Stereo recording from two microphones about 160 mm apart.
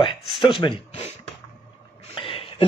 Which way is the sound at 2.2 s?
35° left (ahead or behind).